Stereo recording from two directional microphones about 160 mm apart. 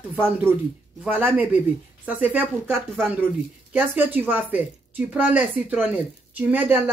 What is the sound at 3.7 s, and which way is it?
Speech, 10° right (ahead or behind).